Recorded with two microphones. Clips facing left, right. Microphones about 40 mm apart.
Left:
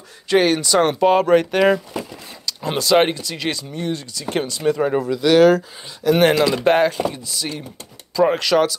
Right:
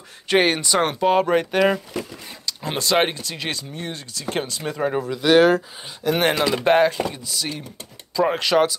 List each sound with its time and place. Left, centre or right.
0.3 s speech: right; by 5.1 s centre
5.1 s speech: centre
6.0 s speech: centre
8.4 s speech: centre